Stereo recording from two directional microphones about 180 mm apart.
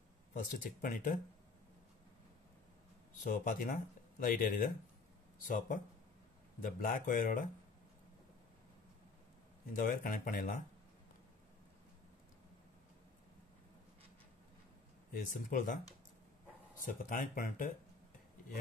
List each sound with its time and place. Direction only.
0.3 s speech: 45° left (ahead or behind)
3.3 s speech: 50° left (ahead or behind)
9.8 s speech: 50° left (ahead or behind)
15.1 s speech: 45° left (ahead or behind)
16.8 s speech: 50° left (ahead or behind)